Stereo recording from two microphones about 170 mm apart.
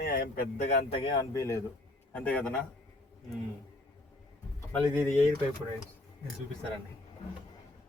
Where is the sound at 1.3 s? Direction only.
15° left (ahead or behind).